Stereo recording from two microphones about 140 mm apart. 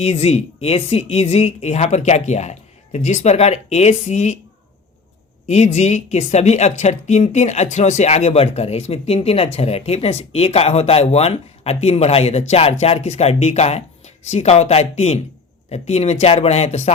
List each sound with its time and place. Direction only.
0.0 s a woman's voice: 50° left (ahead or behind)
5.5 s a woman's voice: 55° left (ahead or behind)